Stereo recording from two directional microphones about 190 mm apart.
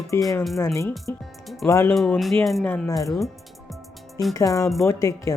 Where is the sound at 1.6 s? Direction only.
15° left (ahead or behind).